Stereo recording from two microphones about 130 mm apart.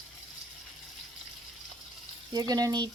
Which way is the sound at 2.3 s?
30° right (ahead or behind).